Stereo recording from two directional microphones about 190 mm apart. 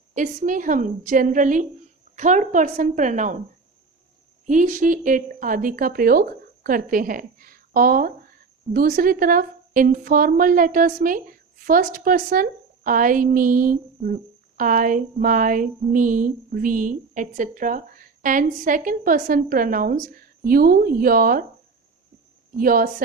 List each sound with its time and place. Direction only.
0.1 s a woman's voice: 40° right (ahead or behind)
4.4 s speech: 40° right (ahead or behind)
22.6 s speech: 50° right (ahead or behind)